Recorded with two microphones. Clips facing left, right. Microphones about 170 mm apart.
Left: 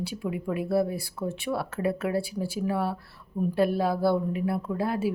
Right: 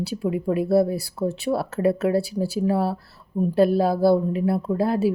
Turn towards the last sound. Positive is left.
turn(degrees=-35)  # may be behind; listen again after turning